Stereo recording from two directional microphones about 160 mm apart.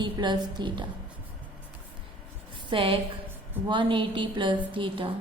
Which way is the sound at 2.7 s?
35° right (ahead or behind).